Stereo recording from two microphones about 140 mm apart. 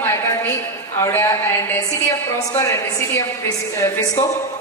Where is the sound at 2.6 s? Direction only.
20° left (ahead or behind).